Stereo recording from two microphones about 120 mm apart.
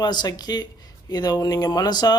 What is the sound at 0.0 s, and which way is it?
Speech, 35° left (ahead or behind).